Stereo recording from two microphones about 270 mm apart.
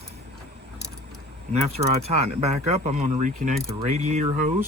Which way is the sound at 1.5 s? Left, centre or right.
Right.